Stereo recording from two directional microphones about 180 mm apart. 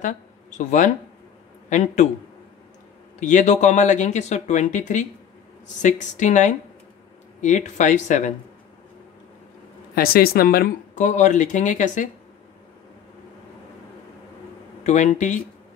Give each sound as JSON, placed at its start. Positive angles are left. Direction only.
{"t": 0.0, "sound": "speech", "side_deg": 45}
{"t": 3.2, "sound": "speech", "side_deg": 45}
{"t": 9.9, "sound": "speech", "side_deg": 55}
{"t": 14.8, "sound": "speech", "side_deg": 40}